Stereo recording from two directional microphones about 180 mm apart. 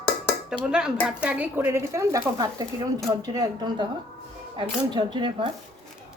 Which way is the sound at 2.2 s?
20° right (ahead or behind).